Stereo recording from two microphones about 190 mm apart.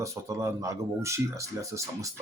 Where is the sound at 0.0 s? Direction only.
15° right (ahead or behind).